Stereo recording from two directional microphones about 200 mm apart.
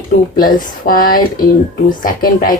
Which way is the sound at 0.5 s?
45° left (ahead or behind).